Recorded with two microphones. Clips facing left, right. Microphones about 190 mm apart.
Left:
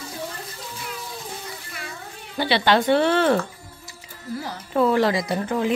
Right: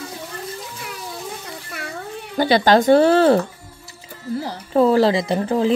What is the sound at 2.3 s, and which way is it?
Speech, 45° right (ahead or behind).